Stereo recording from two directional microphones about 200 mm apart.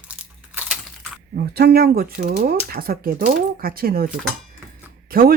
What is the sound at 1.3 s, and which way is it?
Speech, 55° right (ahead or behind).